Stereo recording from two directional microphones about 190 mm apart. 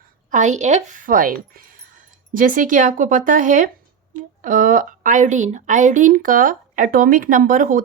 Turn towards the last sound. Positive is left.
turn(degrees=-45)  # may be behind; listen again after turning